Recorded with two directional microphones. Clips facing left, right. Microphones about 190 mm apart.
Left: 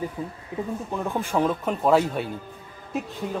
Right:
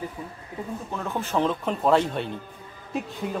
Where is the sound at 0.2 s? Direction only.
30° left (ahead or behind).